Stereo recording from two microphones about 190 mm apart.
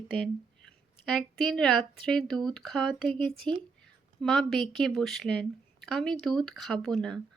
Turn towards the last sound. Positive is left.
turn(degrees=5)  # may be behind; listen again after turning